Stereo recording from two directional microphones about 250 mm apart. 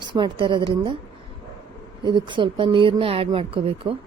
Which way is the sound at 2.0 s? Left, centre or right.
Centre.